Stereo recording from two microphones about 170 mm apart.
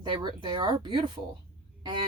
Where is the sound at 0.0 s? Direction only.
25° right (ahead or behind).